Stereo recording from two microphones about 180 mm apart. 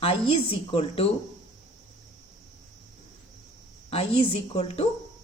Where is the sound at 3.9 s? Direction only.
35° left (ahead or behind).